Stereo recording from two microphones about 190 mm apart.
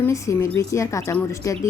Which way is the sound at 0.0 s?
15° left (ahead or behind).